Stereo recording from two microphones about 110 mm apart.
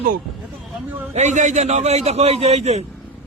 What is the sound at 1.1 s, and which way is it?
A man's voice, 90° right.